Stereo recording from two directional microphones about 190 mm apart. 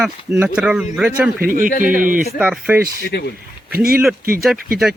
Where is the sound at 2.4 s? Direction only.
5° right (ahead or behind).